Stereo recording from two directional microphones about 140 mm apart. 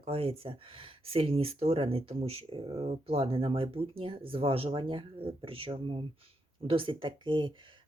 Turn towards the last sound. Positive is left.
turn(degrees=-35)  # may be behind; listen again after turning